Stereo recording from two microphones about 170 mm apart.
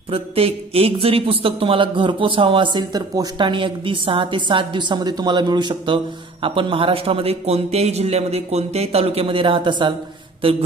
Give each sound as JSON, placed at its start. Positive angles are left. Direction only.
{"t": 0.1, "sound": "a man's voice", "side_deg": -35}